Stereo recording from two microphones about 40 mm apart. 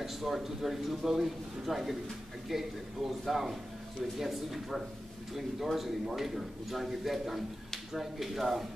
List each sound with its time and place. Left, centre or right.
0.0 s a man's voice: centre